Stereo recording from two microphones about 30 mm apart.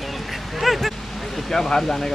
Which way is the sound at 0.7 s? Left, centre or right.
Centre.